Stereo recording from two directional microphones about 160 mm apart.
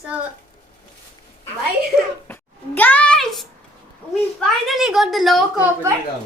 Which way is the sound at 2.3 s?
10° left (ahead or behind).